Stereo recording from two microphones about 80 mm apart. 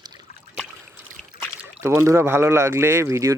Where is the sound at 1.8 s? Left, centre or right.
Right.